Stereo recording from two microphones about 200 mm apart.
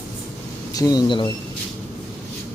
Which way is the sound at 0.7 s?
20° left (ahead or behind).